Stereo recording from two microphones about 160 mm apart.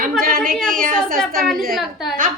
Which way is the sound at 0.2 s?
65° right (ahead or behind).